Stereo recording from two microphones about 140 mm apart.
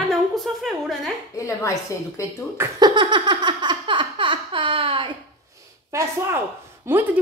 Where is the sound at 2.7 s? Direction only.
30° right (ahead or behind).